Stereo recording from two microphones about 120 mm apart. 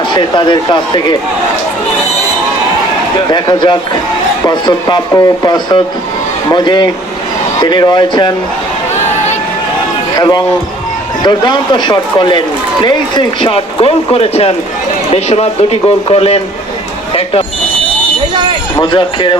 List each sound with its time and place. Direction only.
0.1 s a man's voice: 40° left (ahead or behind)
3.2 s a man's voice: 35° left (ahead or behind)
10.2 s a man's voice: 35° left (ahead or behind); by 16.4 s 55° left (ahead or behind)
18.8 s a man's voice: 40° left (ahead or behind)